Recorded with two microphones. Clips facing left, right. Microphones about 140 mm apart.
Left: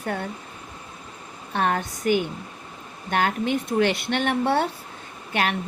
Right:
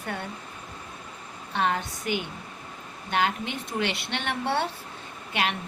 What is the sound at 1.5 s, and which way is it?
Speech, 50° left (ahead or behind).